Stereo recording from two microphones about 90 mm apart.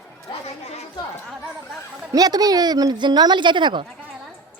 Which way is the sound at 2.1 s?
45° right (ahead or behind).